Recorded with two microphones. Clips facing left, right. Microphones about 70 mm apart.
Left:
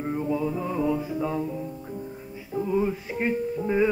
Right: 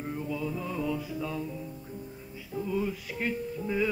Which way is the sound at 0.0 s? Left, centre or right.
Left.